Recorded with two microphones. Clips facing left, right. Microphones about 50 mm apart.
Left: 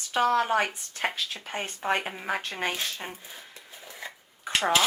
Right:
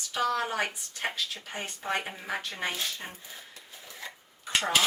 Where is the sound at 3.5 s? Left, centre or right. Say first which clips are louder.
Left 2 dB; left.